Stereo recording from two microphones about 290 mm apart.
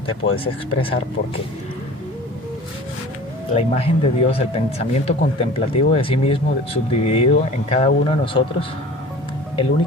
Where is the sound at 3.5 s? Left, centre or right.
Left.